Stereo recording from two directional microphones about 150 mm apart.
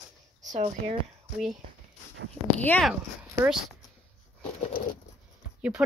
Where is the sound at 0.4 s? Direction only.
55° right (ahead or behind).